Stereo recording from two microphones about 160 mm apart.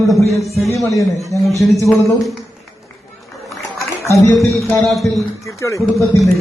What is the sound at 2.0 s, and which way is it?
Speech, centre (ahead or behind).